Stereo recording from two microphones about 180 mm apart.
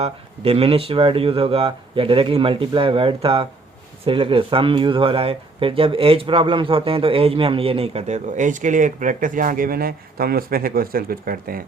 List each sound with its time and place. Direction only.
0.0 s speech: 35° right (ahead or behind); by 11.6 s 55° right (ahead or behind)